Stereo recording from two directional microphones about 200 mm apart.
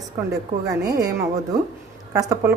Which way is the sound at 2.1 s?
15° right (ahead or behind).